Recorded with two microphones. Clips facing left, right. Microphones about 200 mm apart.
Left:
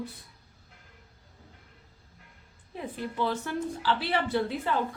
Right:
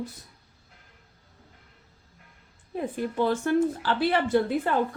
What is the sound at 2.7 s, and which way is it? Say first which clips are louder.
Speech: right 6 dB; 45° right (ahead or behind).